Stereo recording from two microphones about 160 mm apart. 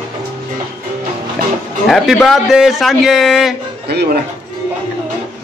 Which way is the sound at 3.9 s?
90° right.